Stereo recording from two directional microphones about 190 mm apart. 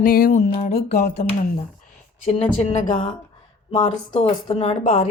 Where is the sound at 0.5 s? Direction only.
35° left (ahead or behind).